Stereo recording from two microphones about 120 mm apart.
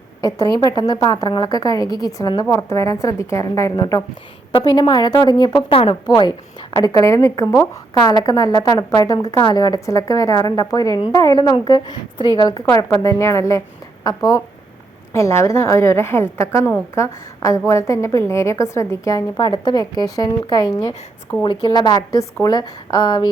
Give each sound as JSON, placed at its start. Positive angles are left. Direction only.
{"t": 0.2, "sound": "a woman's voice", "side_deg": 35}
{"t": 5.6, "sound": "a woman's voice", "side_deg": 50}
{"t": 6.1, "sound": "a woman's voice", "side_deg": 35}
{"t": 6.7, "sound": "a woman's voice", "side_deg": 25}
{"t": 15.1, "sound": "a woman's voice", "side_deg": 20}
{"t": 19.4, "sound": "a woman's voice", "side_deg": 35}